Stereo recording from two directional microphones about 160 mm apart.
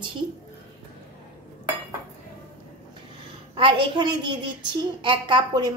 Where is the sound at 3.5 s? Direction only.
30° right (ahead or behind).